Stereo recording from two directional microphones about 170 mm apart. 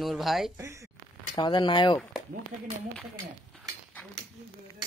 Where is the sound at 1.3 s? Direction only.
25° left (ahead or behind).